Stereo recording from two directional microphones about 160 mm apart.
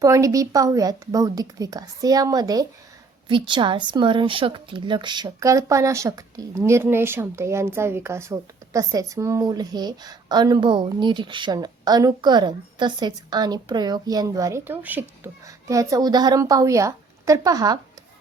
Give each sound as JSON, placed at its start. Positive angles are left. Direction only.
{"t": 0.0, "sound": "speech", "side_deg": -20}